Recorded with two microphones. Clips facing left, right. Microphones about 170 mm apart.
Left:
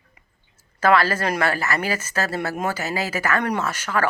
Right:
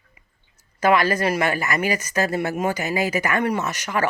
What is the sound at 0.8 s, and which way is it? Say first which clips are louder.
Speech: even; 15° right (ahead or behind).